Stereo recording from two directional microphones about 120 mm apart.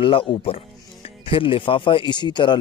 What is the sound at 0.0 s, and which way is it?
A man's voice, 45° left (ahead or behind).